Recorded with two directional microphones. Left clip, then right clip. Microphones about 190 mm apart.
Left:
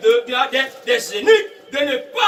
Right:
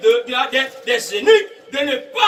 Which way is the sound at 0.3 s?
5° left (ahead or behind).